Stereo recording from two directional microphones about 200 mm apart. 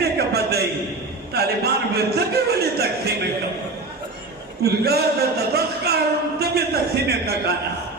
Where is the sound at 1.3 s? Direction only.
55° right (ahead or behind).